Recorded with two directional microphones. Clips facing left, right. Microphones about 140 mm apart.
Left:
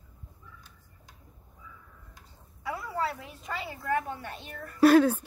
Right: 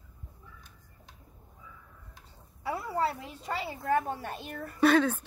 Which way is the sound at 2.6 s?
30° right (ahead or behind).